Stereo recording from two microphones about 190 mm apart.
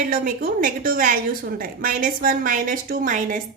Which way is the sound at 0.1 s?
45° right (ahead or behind).